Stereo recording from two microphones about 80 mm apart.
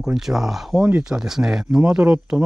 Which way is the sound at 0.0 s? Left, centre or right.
Centre.